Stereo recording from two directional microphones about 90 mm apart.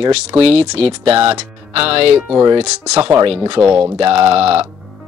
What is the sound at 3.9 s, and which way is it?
Speech, 90° right.